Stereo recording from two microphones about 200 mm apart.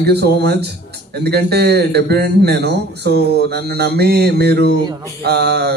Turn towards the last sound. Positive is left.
turn(degrees=-55)  # may be behind; listen again after turning